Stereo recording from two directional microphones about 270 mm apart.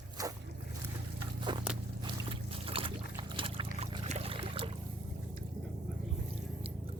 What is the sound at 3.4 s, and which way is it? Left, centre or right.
Boat, centre.